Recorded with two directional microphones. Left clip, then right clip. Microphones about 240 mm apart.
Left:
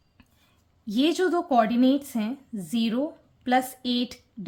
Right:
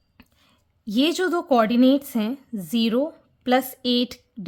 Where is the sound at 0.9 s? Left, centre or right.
Right.